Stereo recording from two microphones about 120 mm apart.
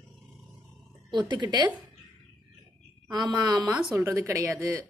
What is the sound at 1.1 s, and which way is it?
Speech, 40° right (ahead or behind).